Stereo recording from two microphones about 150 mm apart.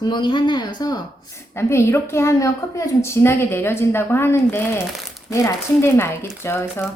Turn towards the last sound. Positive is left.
turn(degrees=15)  # may be behind; listen again after turning